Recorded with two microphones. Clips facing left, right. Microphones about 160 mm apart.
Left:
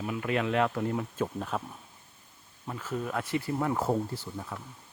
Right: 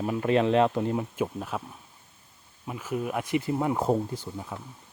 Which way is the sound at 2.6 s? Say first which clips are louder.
Right 3 dB; 10° right (ahead or behind).